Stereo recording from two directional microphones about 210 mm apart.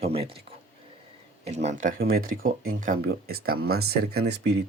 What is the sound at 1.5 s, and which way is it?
Speech, 35° right (ahead or behind).